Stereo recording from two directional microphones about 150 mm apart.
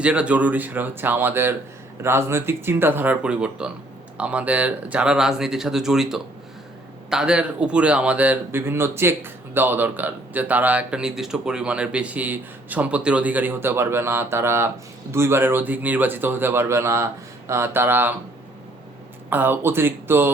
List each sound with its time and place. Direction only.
0.0 s speech: 10° right (ahead or behind)
19.3 s speech: 15° right (ahead or behind)